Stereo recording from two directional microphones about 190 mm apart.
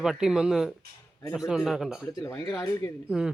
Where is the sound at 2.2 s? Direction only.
20° left (ahead or behind).